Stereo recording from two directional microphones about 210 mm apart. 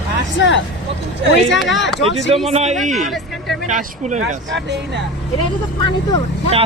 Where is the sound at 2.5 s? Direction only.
30° right (ahead or behind).